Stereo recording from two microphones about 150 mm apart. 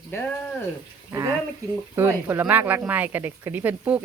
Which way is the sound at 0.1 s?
15° left (ahead or behind).